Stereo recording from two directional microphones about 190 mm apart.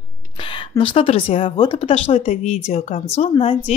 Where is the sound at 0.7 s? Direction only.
25° left (ahead or behind).